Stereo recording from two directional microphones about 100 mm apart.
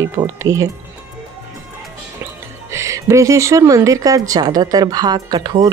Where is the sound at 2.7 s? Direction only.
30° right (ahead or behind).